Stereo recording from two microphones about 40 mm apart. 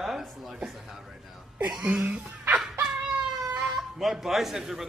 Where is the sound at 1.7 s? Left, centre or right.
Right.